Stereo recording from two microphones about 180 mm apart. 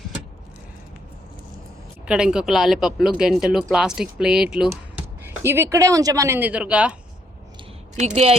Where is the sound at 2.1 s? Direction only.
5° right (ahead or behind).